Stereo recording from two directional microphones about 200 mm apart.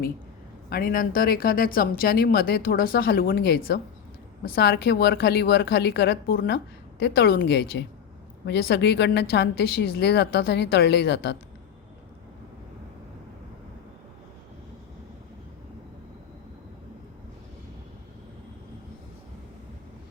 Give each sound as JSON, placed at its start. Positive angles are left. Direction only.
{"t": 0.7, "sound": "a woman's voice", "side_deg": 45}